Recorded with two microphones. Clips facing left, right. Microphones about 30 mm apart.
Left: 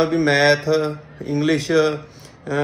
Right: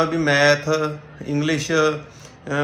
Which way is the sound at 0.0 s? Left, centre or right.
Left.